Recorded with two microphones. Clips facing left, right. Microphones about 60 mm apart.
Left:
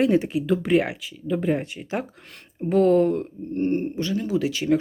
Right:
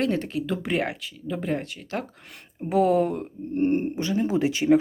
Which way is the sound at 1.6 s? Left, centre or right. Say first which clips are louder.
Left 3 dB; left.